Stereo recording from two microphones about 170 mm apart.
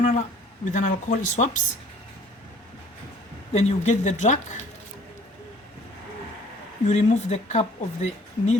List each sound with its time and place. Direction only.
0.6 s speech: 45° left (ahead or behind)
3.5 s speech: 40° left (ahead or behind)
6.8 s speech: 45° left (ahead or behind)